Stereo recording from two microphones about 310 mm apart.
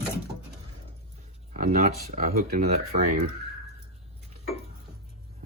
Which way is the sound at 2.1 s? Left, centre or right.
Right.